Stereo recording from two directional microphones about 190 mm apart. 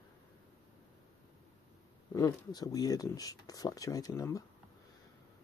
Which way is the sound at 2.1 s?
20° left (ahead or behind).